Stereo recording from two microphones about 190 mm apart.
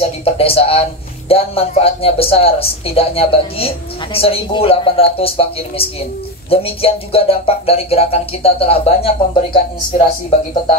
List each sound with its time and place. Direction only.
0.0 s speech: 30° left (ahead or behind)